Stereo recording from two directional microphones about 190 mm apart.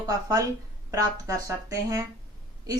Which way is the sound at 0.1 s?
20° right (ahead or behind).